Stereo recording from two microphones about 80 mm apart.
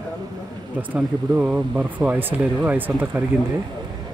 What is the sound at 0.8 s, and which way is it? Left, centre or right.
Speech, centre.